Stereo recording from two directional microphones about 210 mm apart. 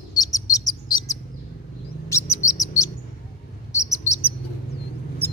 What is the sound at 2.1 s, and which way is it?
Bird, 15° left (ahead or behind).